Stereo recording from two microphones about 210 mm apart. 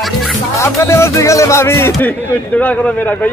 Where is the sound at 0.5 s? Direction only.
15° left (ahead or behind).